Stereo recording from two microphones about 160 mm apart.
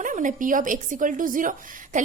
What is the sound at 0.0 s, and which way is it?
Speech, 55° right (ahead or behind).